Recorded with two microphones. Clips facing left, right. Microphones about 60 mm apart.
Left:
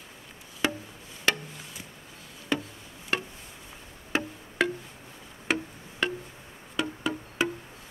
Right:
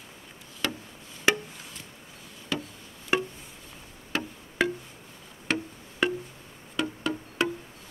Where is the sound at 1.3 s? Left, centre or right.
Centre.